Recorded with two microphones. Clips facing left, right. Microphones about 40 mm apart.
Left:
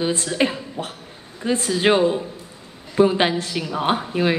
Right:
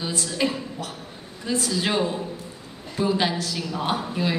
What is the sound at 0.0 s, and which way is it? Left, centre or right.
Speech, left.